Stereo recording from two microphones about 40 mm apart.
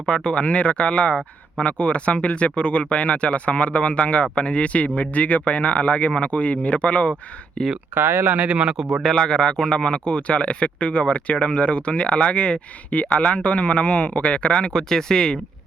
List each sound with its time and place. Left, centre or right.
0.0 s speech: left
7.9 s speech: right
8.4 s speech: right
8.6 s speech: centre
9.1 s speech: centre